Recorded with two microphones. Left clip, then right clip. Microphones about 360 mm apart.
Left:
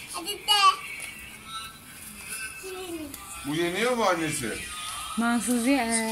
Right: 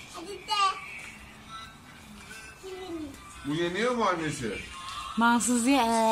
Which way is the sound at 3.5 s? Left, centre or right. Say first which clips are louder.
Left 2 dB; centre.